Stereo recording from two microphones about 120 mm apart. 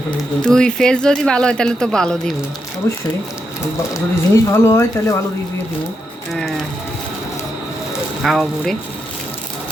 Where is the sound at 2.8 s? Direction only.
25° left (ahead or behind).